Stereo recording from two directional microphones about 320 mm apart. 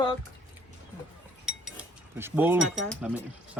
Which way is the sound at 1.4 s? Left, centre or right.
Centre.